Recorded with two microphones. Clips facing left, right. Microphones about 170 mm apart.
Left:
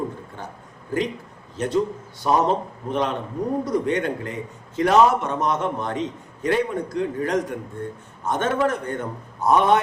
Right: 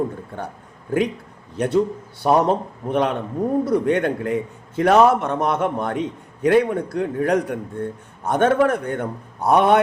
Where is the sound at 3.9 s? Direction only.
55° right (ahead or behind).